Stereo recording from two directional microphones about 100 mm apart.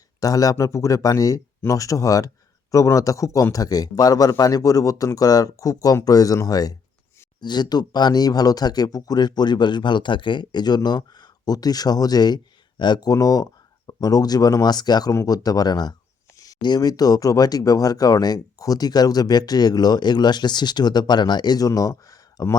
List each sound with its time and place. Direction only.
0.2 s a man's voice: 35° left (ahead or behind)